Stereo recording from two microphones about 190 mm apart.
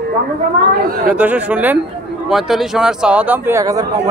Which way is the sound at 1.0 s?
5° right (ahead or behind).